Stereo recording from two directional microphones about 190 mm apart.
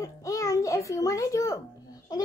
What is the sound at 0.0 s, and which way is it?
Babbling, 15° left (ahead or behind).